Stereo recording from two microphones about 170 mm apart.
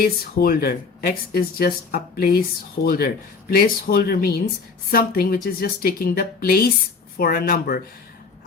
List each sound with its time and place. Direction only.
0.0 s speech: 60° left (ahead or behind)